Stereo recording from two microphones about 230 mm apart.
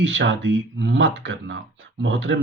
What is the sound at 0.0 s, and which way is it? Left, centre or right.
Speech, right.